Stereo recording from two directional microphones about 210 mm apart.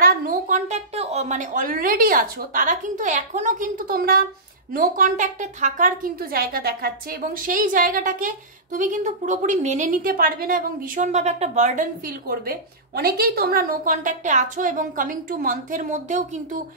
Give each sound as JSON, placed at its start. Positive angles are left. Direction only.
{"t": 0.0, "sound": "a woman's voice", "side_deg": -45}